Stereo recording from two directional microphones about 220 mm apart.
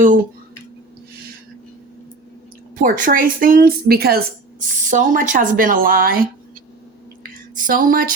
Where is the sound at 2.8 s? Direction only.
40° right (ahead or behind).